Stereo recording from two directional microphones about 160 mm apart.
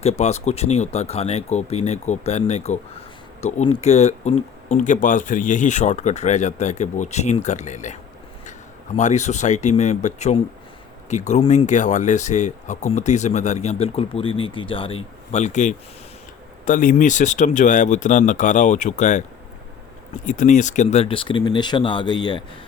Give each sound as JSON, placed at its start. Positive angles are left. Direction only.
{"t": 0.0, "sound": "speech", "side_deg": 45}
{"t": 9.0, "sound": "speech", "side_deg": 45}
{"t": 20.2, "sound": "speech", "side_deg": 50}